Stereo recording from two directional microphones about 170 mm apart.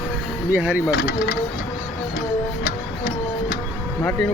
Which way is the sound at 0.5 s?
10° right (ahead or behind).